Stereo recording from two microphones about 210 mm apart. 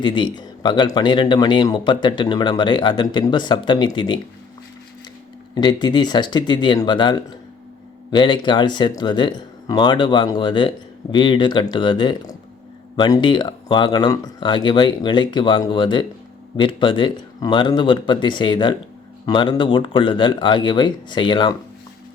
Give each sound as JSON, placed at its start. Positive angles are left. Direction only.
{"t": 0.0, "sound": "a man's voice", "side_deg": 20}
{"t": 5.5, "sound": "a man's voice", "side_deg": 20}